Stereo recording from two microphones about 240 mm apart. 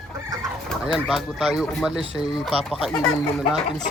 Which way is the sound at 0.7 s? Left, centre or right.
Centre.